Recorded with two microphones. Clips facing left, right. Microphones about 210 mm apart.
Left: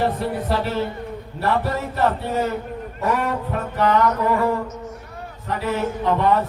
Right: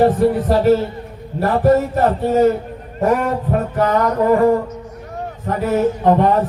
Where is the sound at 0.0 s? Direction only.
45° right (ahead or behind).